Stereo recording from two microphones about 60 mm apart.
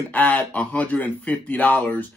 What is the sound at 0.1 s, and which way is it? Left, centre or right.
Speech, left.